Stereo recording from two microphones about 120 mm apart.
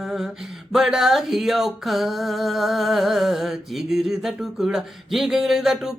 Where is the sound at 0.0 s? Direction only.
5° right (ahead or behind).